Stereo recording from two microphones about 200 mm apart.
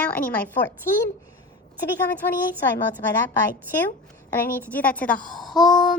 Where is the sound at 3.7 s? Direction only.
10° left (ahead or behind).